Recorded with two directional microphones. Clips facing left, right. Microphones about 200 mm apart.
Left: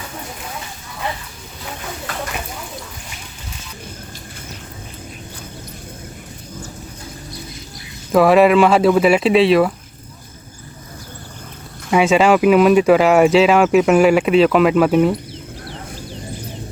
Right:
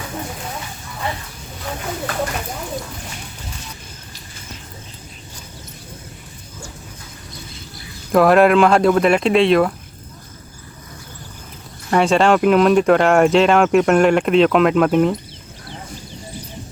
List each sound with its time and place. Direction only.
8.1 s speech: centre (ahead or behind)
11.9 s speech: 5° left (ahead or behind)